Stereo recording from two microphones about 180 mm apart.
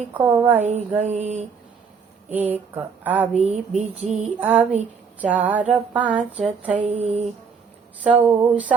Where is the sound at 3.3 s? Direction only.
40° right (ahead or behind).